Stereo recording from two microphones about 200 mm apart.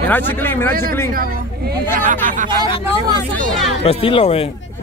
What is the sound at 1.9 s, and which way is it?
Speech, 40° right (ahead or behind).